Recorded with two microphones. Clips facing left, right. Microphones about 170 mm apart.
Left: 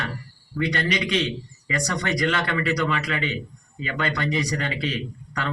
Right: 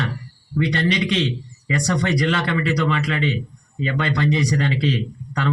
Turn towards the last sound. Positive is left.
turn(degrees=-30)  # may be behind; listen again after turning